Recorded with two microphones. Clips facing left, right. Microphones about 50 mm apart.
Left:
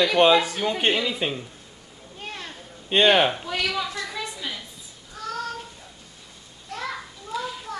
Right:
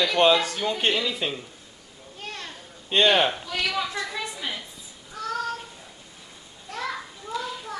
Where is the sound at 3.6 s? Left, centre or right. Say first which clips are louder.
Right 1 dB; centre.